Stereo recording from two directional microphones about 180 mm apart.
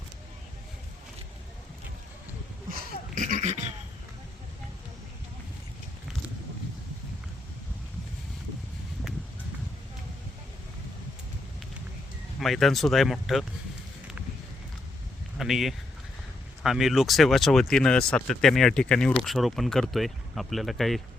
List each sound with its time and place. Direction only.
2.6 s a sound: 50° right (ahead or behind)
12.4 s speech: centre (ahead or behind)
15.4 s speech: centre (ahead or behind)